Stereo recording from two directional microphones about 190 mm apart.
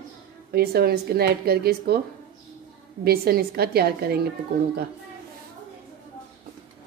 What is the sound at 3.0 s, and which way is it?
A woman's voice, 55° right (ahead or behind).